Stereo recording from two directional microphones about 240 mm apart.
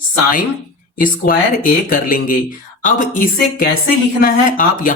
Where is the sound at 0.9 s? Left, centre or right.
Left.